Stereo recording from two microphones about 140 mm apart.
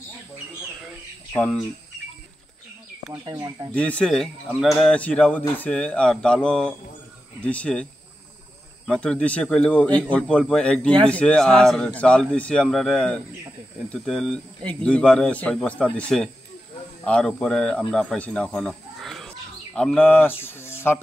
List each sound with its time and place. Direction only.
1.3 s speech: 10° left (ahead or behind)
3.1 s speech: 30° right (ahead or behind)
3.7 s speech: 10° left (ahead or behind)